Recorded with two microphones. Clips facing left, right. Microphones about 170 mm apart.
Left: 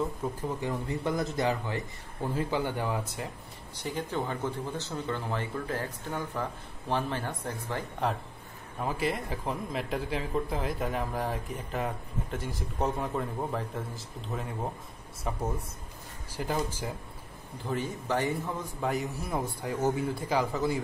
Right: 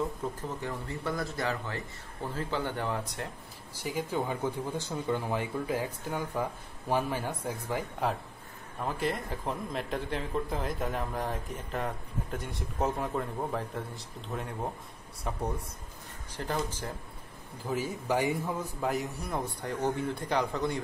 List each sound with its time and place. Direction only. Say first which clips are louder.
0.2 s speech: left 3 dB; 10° left (ahead or behind)
3.8 s speech: right 1 dB; 10° right (ahead or behind); by 16.9 s 10° left (ahead or behind)
17.6 s speech: right 1 dB; 10° right (ahead or behind)
18.9 s speech: left 2 dB; centre (ahead or behind)